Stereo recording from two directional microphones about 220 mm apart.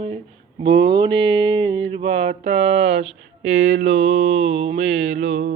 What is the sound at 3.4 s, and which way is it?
Speech, 55° right (ahead or behind).